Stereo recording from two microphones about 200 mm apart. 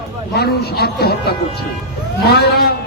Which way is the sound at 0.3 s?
50° left (ahead or behind).